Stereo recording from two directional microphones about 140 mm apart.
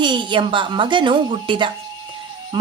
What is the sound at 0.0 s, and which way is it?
Speech, 35° right (ahead or behind).